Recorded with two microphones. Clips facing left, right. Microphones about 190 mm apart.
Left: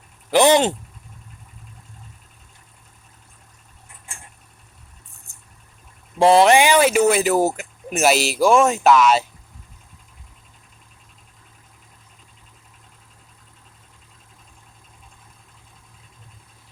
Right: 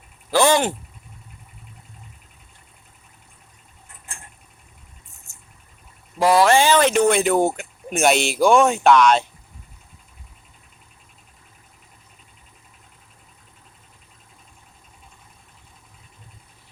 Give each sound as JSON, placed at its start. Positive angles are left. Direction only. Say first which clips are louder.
{"t": 0.3, "sound": "speech", "louder": "left 3 dB", "side_deg": 20}
{"t": 6.1, "sound": "speech", "louder": "left 3 dB", "side_deg": 25}